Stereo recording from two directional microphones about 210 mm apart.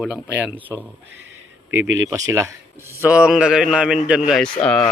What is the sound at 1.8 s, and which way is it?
Speech, 65° right (ahead or behind).